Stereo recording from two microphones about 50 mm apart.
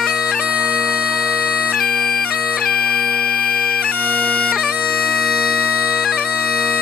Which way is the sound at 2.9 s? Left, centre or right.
Left.